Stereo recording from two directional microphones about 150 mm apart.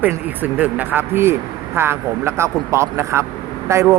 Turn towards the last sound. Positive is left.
turn(degrees=-20)  # may be behind; listen again after turning